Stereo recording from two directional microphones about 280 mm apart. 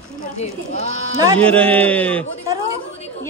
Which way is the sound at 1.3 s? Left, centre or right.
Centre.